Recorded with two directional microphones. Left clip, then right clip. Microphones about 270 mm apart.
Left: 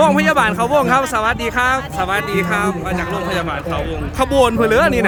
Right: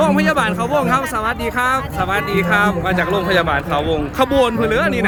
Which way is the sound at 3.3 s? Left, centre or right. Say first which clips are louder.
Right 5 dB; centre.